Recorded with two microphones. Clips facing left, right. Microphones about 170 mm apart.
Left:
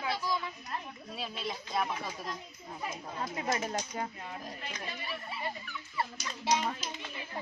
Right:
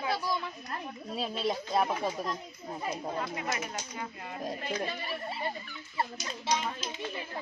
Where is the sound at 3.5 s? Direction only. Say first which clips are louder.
Left 3 dB; 35° left (ahead or behind).